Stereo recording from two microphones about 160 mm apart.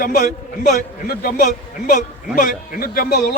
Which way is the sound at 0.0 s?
60° left (ahead or behind).